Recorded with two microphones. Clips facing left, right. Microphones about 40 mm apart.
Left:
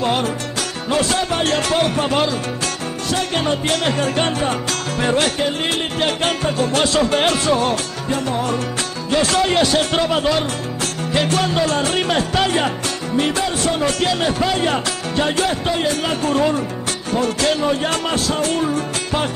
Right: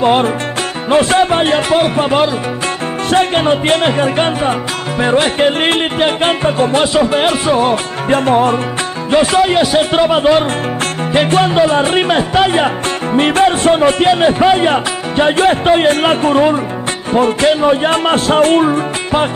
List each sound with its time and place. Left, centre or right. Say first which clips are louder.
0.0 s speech: right 8 dB; right
0.8 s music: right 9 dB; right
3.1 s music: right 8 dB; right
5.4 s speech: right 8 dB; right
6.0 s music: right 5 dB; right
6.7 s speech: right 5 dB; centre
7.5 s music: right 6 dB; right
8.1 s speech: right 10 dB; right
9.1 s music: right 6 dB; right
13.1 s speech: right 9 dB; right